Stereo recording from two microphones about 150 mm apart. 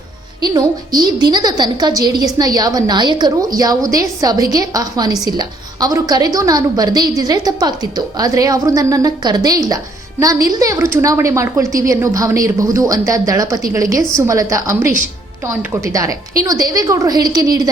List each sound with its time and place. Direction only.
0.4 s a woman's voice: 25° right (ahead or behind)